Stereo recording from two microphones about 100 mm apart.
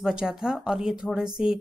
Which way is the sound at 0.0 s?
5° right (ahead or behind).